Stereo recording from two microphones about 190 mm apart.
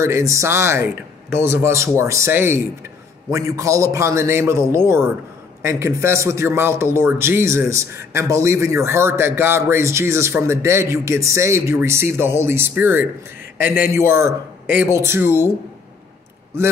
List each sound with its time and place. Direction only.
0.0 s a man's voice: 15° right (ahead or behind)
13.6 s a man's voice: 50° left (ahead or behind)
13.9 s a man's voice: 15° right (ahead or behind)